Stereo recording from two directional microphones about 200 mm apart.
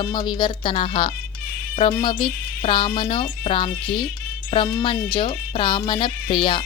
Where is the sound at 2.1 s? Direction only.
25° left (ahead or behind).